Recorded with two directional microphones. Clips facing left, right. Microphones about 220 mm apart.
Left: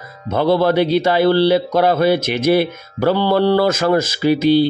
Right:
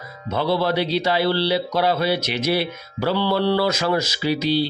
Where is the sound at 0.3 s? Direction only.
50° left (ahead or behind).